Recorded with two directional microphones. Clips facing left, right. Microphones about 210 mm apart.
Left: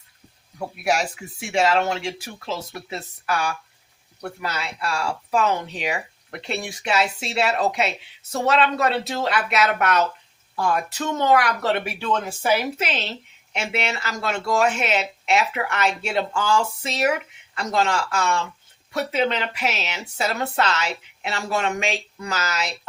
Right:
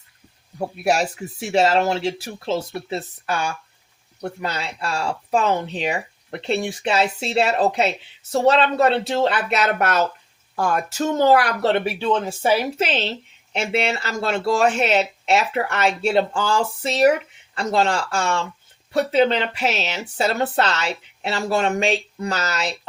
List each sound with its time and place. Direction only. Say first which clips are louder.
0.9 s a woman's voice: right 3 dB; 35° right (ahead or behind)